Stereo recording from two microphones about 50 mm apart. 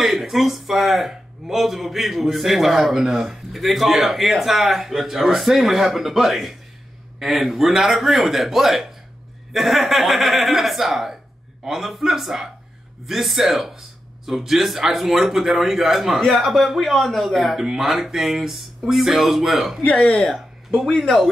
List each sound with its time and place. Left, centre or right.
0.0 s speech: centre
19.8 s speech: left
20.2 s speech: centre